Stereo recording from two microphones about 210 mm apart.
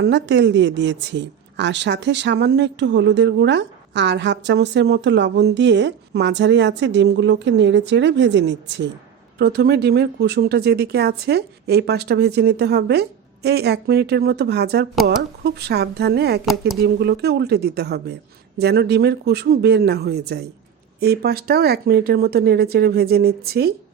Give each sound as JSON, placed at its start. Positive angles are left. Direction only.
{"t": 0.0, "sound": "speech", "side_deg": -55}